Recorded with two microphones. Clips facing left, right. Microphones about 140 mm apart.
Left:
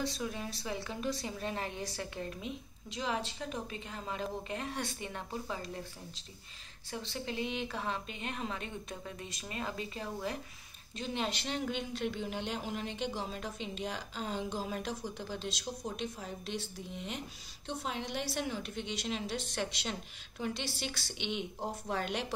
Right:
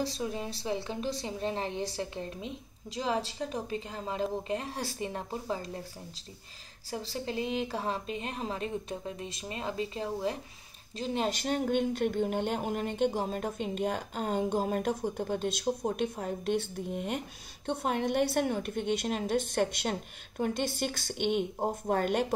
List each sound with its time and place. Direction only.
0.0 s a woman's voice: 30° right (ahead or behind)
6.9 s a woman's voice: 35° right (ahead or behind)
11.0 s speech: 40° right (ahead or behind)